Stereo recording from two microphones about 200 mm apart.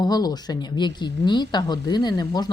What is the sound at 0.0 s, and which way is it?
Speech, 20° left (ahead or behind).